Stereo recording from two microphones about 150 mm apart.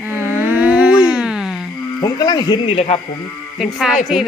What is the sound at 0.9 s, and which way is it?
Dog, 25° left (ahead or behind).